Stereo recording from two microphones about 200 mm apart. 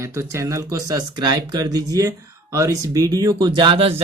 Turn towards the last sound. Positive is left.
turn(degrees=-25)  # may be behind; listen again after turning